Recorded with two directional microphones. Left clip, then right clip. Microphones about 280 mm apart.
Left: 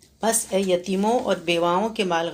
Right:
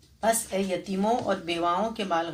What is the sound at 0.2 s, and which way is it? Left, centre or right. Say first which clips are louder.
Speech: left 3 dB; left.